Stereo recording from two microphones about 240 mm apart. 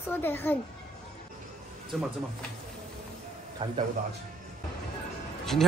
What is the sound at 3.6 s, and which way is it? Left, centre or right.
Speech, right.